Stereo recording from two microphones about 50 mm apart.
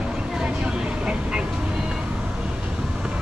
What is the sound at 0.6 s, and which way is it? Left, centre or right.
Vehicle, centre.